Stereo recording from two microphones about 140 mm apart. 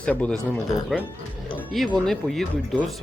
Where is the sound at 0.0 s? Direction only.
10° left (ahead or behind).